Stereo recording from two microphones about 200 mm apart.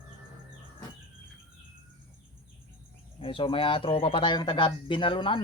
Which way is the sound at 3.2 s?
25° left (ahead or behind).